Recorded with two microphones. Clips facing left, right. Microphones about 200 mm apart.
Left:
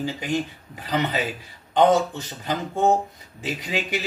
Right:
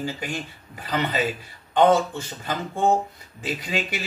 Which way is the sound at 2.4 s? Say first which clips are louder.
Left 2 dB; 15° left (ahead or behind).